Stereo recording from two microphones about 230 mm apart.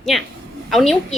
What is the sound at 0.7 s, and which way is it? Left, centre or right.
Speech, centre.